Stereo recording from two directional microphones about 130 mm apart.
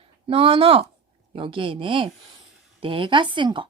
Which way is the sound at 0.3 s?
45° right (ahead or behind).